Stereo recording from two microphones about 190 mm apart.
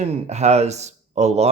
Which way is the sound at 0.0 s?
35° right (ahead or behind).